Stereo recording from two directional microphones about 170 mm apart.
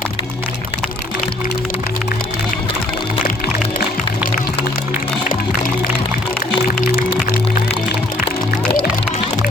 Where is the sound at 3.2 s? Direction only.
55° left (ahead or behind).